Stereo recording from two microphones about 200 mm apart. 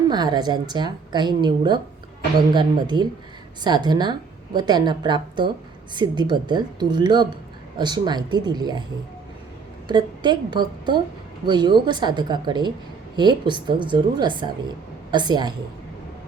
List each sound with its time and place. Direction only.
0.1 s a woman's voice: 20° right (ahead or behind)
9.9 s a woman's voice: 20° right (ahead or behind)